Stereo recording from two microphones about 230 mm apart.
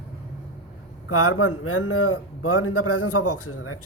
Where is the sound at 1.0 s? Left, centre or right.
Left.